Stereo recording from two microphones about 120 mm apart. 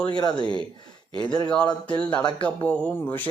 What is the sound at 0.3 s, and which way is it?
Speech, 45° right (ahead or behind).